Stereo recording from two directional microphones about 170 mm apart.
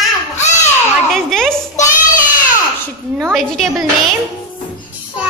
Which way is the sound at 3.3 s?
Centre (ahead or behind).